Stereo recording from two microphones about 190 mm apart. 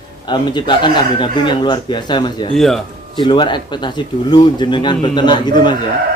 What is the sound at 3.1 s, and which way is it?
Speech, 25° left (ahead or behind).